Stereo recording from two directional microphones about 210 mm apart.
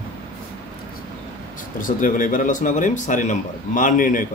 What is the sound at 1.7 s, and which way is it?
Speech, 40° left (ahead or behind).